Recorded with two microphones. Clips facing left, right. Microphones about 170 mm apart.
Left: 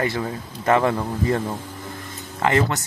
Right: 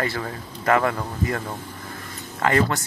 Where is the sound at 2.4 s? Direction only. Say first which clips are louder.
Left 1 dB; 20° left (ahead or behind).